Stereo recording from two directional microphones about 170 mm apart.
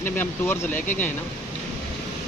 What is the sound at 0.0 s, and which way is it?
Speech, 15° left (ahead or behind).